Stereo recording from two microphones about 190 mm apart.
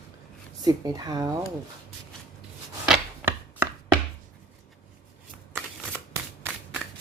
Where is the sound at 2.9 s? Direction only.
10° right (ahead or behind).